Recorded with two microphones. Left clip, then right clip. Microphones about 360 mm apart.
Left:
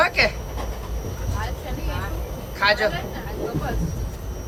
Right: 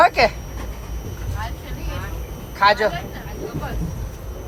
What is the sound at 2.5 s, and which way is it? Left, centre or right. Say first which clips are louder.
Speech: right 4 dB; centre.